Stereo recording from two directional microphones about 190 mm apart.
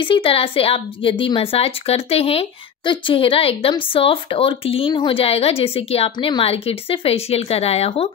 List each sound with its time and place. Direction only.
0.0 s a woman's voice: 30° left (ahead or behind)